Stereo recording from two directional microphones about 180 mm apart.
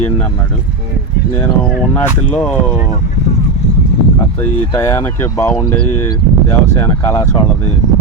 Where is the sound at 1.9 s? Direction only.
5° left (ahead or behind).